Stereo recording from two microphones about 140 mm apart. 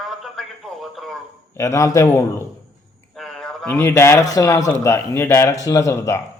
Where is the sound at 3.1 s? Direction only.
5° left (ahead or behind); by 6.2 s 20° left (ahead or behind).